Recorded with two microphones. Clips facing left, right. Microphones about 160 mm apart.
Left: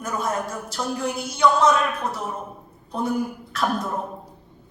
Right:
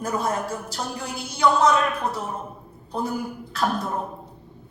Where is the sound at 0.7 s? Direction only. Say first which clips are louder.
Left 5 dB; 30° right (ahead or behind).